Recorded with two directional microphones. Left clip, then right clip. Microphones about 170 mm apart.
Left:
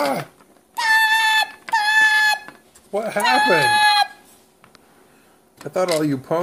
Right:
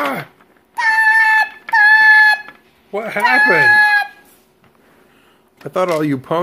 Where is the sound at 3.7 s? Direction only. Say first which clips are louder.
Right 4 dB; 70° right (ahead or behind).